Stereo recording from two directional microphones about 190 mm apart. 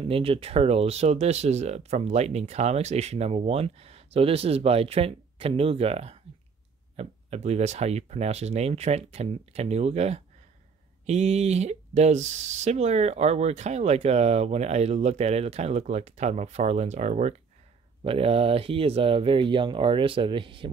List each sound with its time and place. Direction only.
0.1 s speech: 30° right (ahead or behind)